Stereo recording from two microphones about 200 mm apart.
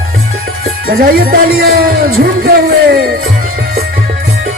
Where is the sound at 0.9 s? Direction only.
45° right (ahead or behind).